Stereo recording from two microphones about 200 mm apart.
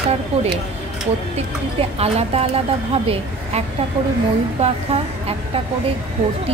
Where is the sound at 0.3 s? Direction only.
30° right (ahead or behind).